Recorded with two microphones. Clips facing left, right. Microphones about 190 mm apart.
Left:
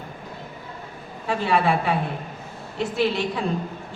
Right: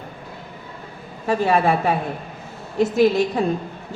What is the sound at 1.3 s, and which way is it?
A woman's voice, 45° right (ahead or behind).